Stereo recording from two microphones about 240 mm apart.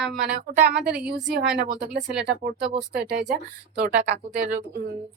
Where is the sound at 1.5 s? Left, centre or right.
Right.